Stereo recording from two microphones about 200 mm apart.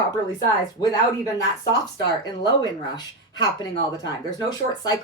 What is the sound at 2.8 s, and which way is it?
A woman's voice, 20° left (ahead or behind).